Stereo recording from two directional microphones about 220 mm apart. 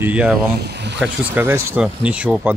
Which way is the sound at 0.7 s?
50° right (ahead or behind).